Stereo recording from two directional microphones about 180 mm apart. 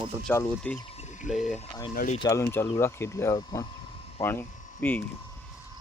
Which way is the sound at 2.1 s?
20° left (ahead or behind).